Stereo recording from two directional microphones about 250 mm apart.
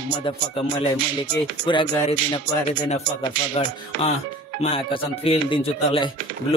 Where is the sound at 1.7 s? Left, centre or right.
Centre.